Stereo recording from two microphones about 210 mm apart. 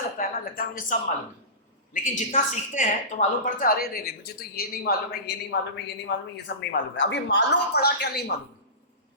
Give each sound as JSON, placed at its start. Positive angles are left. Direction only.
{"t": 0.2, "sound": "a woman's voice", "side_deg": 40}